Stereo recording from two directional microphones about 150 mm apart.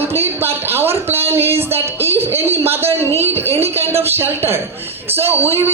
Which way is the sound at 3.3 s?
15° right (ahead or behind).